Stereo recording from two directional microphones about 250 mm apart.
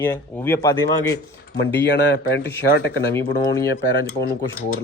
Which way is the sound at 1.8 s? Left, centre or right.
Left.